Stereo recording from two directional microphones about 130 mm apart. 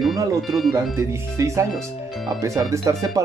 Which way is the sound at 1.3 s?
25° right (ahead or behind).